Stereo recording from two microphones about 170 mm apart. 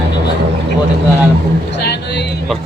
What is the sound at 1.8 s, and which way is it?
Speech, 85° left.